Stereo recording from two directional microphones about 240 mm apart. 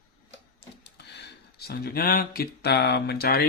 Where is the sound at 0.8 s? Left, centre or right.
Left.